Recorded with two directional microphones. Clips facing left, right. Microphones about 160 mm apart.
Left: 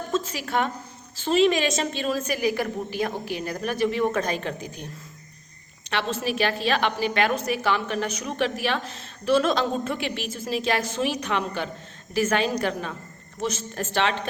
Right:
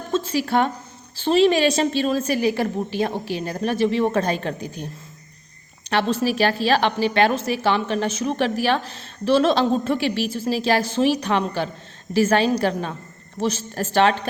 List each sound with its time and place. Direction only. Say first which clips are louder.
0.1 s a woman's voice: right 6 dB; 30° right (ahead or behind)
5.9 s a woman's voice: right 6 dB; 40° right (ahead or behind)